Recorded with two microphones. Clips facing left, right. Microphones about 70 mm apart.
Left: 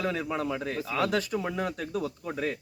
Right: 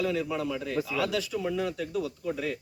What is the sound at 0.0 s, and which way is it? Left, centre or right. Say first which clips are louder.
Speech: right 1 dB; left.